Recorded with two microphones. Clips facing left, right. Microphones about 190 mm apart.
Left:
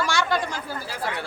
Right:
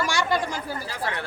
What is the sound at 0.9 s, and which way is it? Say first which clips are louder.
Speech: left 3 dB; 10° left (ahead or behind).